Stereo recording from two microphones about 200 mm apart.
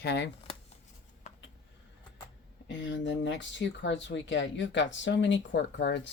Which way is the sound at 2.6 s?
65° left (ahead or behind).